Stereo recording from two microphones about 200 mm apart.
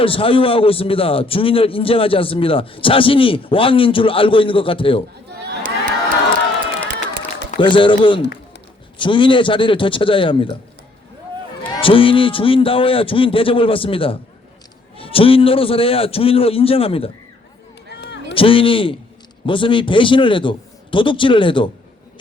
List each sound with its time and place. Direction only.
0.0 s a man's voice: 25° left (ahead or behind)
5.3 s crowd: 55° right (ahead or behind)
7.5 s a man's voice: 25° left (ahead or behind)
11.8 s a man's voice: 25° left (ahead or behind)
18.0 s run: 60° left (ahead or behind)
18.3 s a man's voice: 25° left (ahead or behind)